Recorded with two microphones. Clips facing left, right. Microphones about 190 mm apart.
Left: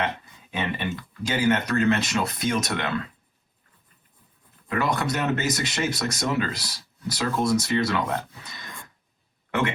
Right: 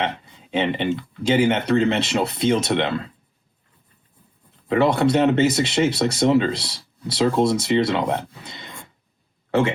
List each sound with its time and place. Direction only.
0.0 s speech: 25° right (ahead or behind)
4.7 s speech: 30° right (ahead or behind)